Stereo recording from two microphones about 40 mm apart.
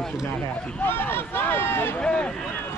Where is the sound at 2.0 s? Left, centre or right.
Left.